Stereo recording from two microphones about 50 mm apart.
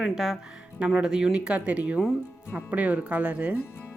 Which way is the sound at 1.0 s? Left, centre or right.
Centre.